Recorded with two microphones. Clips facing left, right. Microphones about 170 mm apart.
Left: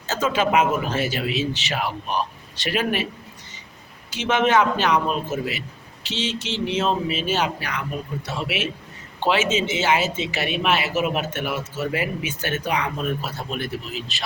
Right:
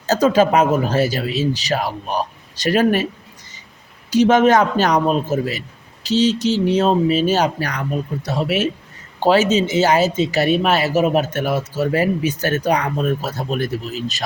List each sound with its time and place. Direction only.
0.1 s speech: 40° right (ahead or behind)
4.1 s speech: 40° right (ahead or behind)